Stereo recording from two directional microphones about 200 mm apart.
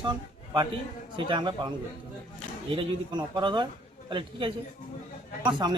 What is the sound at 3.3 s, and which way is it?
A man's voice, 25° right (ahead or behind).